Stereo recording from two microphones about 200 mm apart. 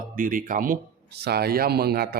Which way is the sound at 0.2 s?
40° right (ahead or behind).